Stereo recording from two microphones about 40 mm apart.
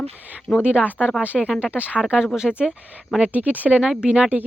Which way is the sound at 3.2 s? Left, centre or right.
Right.